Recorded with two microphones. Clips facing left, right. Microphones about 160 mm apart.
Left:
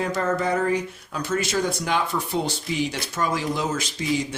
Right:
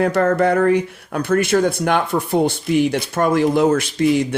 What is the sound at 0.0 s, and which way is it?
Speech, 60° right (ahead or behind).